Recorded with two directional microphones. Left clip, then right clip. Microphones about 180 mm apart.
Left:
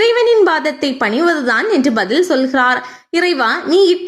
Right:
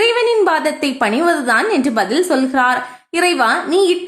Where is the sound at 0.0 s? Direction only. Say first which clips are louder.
Left 3 dB; 15° left (ahead or behind).